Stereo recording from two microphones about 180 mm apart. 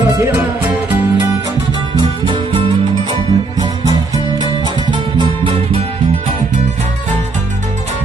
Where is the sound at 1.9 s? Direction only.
25° right (ahead or behind).